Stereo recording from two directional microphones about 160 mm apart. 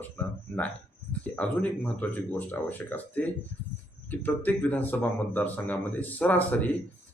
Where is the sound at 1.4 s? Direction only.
10° left (ahead or behind).